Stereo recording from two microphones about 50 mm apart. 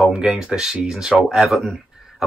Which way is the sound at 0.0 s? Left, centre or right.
Centre.